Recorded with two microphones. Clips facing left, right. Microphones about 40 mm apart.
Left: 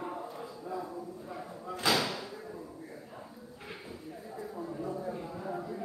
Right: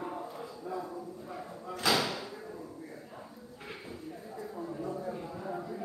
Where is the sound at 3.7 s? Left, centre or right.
Centre.